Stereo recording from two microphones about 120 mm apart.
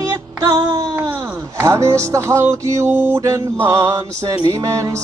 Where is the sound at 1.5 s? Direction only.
25° right (ahead or behind).